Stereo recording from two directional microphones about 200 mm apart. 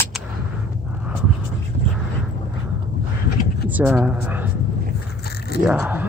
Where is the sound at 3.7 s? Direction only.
10° right (ahead or behind).